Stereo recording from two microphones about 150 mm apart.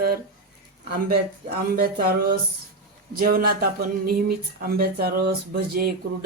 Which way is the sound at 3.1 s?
75° right (ahead or behind).